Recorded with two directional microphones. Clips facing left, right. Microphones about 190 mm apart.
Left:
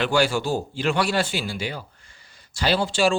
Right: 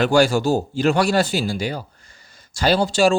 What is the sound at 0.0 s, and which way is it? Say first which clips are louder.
Speech: right 5 dB; 45° right (ahead or behind).